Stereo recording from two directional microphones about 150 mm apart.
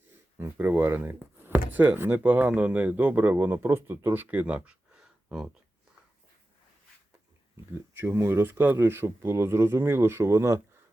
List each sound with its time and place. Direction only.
0.3 s speech: 15° right (ahead or behind)
7.9 s speech: 15° right (ahead or behind)